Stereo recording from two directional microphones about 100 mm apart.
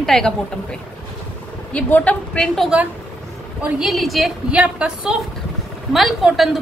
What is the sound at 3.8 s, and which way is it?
Speech, centre (ahead or behind).